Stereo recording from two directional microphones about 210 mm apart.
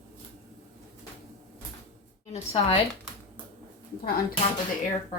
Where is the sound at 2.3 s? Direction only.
30° left (ahead or behind).